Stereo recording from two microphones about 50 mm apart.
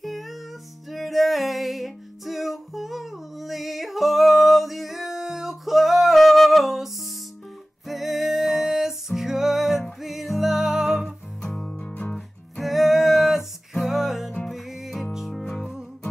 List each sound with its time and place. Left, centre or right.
0.0 s music: centre
7.9 s music: centre
11.4 s music: centre
11.8 s music: left
12.5 s music: centre